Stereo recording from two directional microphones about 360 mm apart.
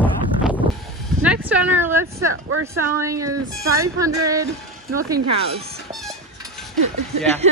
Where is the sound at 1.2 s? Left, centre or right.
Centre.